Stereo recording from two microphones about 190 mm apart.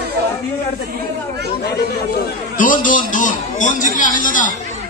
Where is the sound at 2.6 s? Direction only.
45° left (ahead or behind).